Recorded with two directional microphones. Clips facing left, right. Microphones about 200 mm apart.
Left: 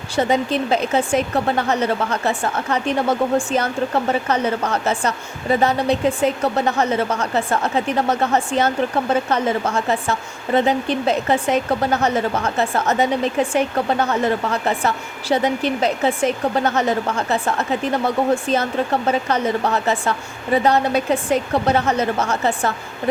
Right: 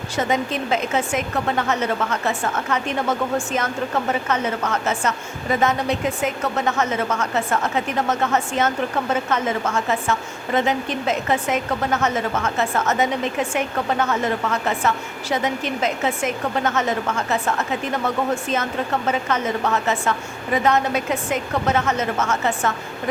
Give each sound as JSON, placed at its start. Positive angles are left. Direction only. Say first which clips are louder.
{"t": 0.2, "sound": "a woman's voice", "louder": "left 4 dB", "side_deg": 35}